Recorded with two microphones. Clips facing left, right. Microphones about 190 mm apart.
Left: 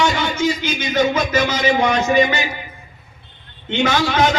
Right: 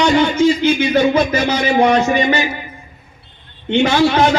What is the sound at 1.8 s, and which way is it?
Speech, 35° right (ahead or behind).